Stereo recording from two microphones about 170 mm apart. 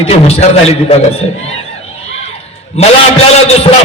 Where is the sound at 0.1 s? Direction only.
35° left (ahead or behind).